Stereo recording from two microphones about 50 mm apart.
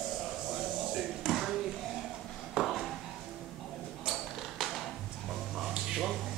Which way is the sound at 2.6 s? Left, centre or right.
Centre.